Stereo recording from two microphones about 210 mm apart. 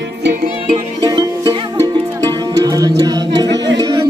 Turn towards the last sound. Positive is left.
turn(degrees=-20)  # may be behind; listen again after turning